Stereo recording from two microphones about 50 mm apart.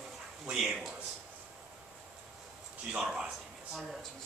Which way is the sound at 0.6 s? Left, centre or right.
Centre.